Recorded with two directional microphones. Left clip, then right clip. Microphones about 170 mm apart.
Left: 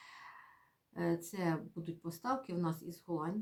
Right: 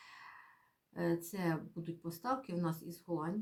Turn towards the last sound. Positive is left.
turn(degrees=0)  # may be behind; listen again after turning